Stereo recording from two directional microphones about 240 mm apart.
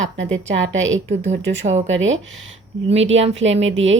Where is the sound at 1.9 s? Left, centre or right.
Right.